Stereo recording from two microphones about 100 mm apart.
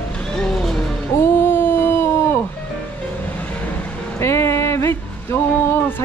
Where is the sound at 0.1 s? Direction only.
10° left (ahead or behind).